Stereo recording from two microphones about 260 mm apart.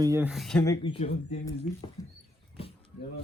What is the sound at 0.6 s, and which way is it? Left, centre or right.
Speech, centre.